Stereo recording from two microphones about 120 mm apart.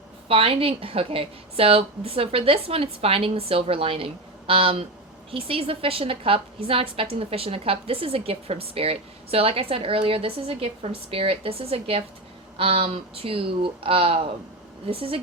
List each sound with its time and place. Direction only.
0.3 s a woman's voice: 50° right (ahead or behind)